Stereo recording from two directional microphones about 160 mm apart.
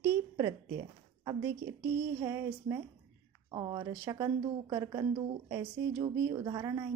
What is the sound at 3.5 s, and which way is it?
Speech, 30° right (ahead or behind).